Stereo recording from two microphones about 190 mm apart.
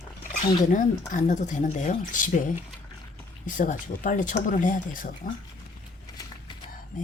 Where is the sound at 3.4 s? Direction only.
45° left (ahead or behind).